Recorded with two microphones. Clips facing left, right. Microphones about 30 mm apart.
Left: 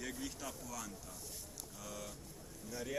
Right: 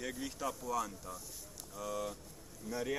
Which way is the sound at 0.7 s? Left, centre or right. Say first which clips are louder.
Right 10 dB; right.